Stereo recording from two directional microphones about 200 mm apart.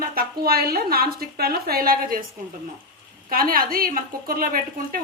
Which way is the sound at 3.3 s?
45° right (ahead or behind).